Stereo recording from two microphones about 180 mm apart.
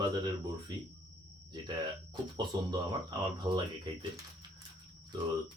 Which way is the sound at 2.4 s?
25° right (ahead or behind).